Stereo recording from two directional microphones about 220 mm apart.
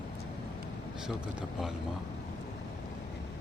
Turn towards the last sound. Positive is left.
turn(degrees=0)  # may be behind; listen again after turning